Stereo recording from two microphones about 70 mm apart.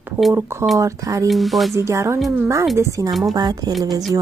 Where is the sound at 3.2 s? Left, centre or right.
Right.